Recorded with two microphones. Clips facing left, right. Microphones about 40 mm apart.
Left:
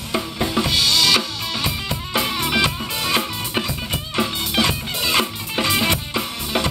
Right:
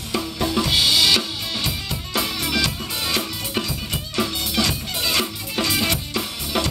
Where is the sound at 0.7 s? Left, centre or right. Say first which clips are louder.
Even; centre.